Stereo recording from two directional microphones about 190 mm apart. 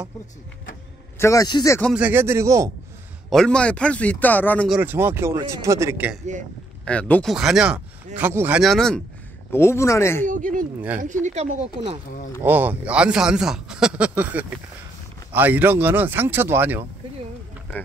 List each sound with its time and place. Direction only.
1.2 s speech: 20° left (ahead or behind)
2.0 s a man's voice: 10° right (ahead or behind)
3.3 s speech: 5° left (ahead or behind)
4.6 s a man's voice: 10° right (ahead or behind)
6.8 s a man's voice: 5° left (ahead or behind)
9.5 s speech: 15° left (ahead or behind)
10.2 s speech: 45° right (ahead or behind)
12.4 s a man's voice: 10° right (ahead or behind)